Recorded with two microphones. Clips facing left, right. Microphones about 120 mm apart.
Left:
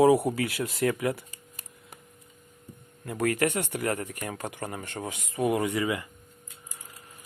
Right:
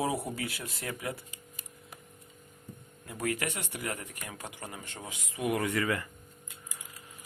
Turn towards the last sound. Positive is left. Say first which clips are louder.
# left 3 dB
turn(degrees=15)  # may be behind; listen again after turning